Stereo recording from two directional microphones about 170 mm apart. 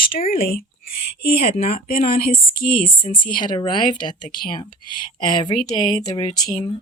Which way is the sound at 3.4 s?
25° left (ahead or behind).